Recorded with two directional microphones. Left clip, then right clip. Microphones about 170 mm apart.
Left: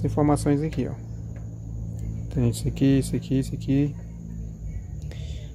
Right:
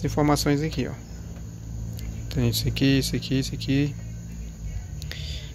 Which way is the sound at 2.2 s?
15° left (ahead or behind).